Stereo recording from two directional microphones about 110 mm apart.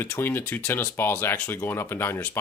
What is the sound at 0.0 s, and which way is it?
Speech, 20° left (ahead or behind).